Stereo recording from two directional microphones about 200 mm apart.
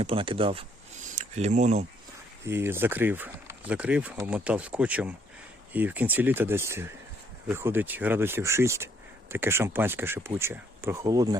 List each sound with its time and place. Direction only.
0.0 s speech: 25° right (ahead or behind)
2.4 s speech: 10° right (ahead or behind)